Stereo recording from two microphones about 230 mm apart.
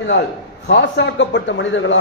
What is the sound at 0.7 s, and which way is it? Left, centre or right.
A man's voice, left.